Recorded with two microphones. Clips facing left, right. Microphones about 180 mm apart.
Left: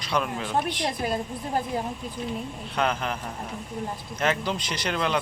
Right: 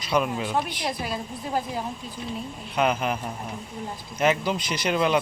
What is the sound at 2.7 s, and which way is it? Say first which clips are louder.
Speech: right 3 dB; 10° right (ahead or behind).